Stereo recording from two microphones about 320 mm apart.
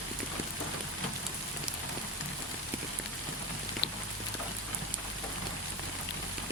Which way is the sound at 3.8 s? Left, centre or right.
Left.